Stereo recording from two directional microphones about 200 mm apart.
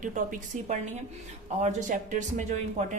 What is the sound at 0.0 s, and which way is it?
Speech, 40° right (ahead or behind).